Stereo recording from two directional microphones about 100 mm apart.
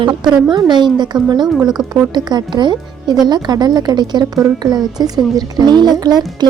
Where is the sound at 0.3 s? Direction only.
45° right (ahead or behind).